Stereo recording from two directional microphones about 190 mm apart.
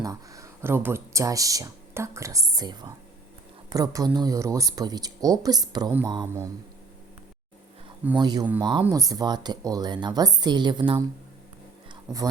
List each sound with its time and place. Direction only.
0.0 s speech: 15° right (ahead or behind)
8.2 s speech: 20° right (ahead or behind)